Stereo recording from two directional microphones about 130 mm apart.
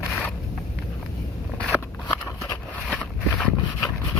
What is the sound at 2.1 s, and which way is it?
Biting, 30° left (ahead or behind).